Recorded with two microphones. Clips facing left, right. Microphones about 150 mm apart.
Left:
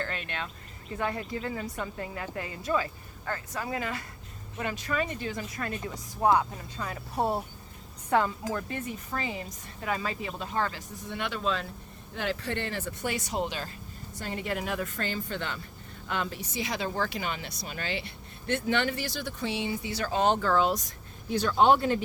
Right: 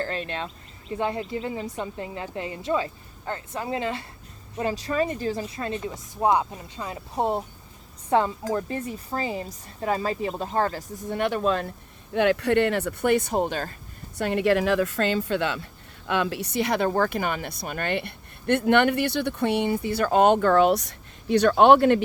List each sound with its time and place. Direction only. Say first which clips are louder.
0.0 s speech: right 6 dB; 35° right (ahead or behind); by 11.7 s 55° right (ahead or behind)
12.1 s speech: right 12 dB; 65° right (ahead or behind); by 13.7 s 50° right (ahead or behind)
14.2 s a woman's voice: right 11 dB; 70° right (ahead or behind)